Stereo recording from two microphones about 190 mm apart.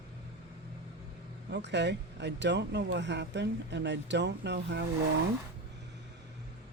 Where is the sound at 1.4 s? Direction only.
65° right (ahead or behind).